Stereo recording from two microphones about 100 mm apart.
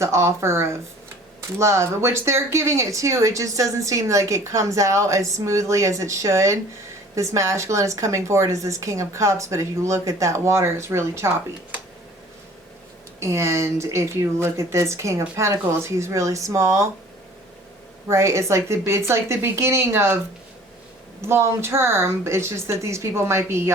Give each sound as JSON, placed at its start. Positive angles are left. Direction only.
{"t": 0.0, "sound": "speech", "side_deg": -30}
{"t": 13.1, "sound": "speech", "side_deg": -30}
{"t": 18.1, "sound": "speech", "side_deg": -30}
{"t": 21.2, "sound": "speech", "side_deg": -25}